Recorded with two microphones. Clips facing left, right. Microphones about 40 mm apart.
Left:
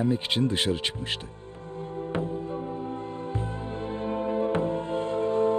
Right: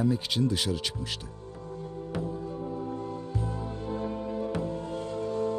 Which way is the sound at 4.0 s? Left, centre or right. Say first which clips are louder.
Left 8 dB; left.